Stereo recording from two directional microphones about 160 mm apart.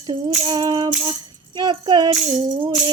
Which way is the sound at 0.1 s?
25° right (ahead or behind).